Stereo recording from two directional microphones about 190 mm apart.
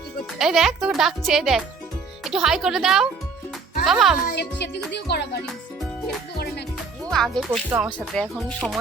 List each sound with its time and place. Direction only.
0.3 s speech: centre (ahead or behind)
4.3 s speech: 60° left (ahead or behind)
6.3 s music: 55° left (ahead or behind)
7.1 s speech: centre (ahead or behind)